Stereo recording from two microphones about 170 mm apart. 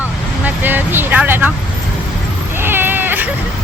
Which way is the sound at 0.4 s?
10° right (ahead or behind).